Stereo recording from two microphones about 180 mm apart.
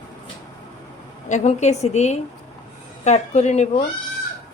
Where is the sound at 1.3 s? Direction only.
40° left (ahead or behind).